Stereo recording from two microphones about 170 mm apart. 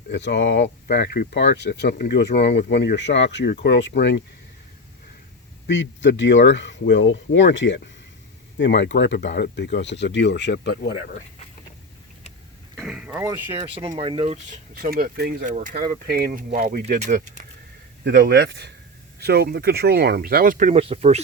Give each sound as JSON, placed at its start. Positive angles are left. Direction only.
{"t": 0.1, "sound": "speech", "side_deg": 90}
{"t": 5.6, "sound": "speech", "side_deg": 90}
{"t": 12.7, "sound": "vehicle", "side_deg": 0}
{"t": 13.2, "sound": "speech", "side_deg": -15}
{"t": 14.1, "sound": "speech", "side_deg": -35}
{"t": 14.8, "sound": "speech", "side_deg": -60}
{"t": 15.4, "sound": "speech", "side_deg": -50}
{"t": 16.0, "sound": "speech", "side_deg": -65}
{"t": 16.8, "sound": "speech", "side_deg": -45}
{"t": 18.0, "sound": "speech", "side_deg": -75}